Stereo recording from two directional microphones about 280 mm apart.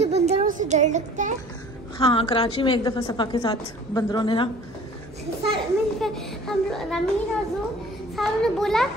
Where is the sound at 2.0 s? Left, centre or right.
Centre.